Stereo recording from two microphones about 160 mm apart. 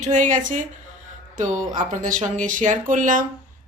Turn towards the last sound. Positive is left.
turn(degrees=-55)  # may be behind; listen again after turning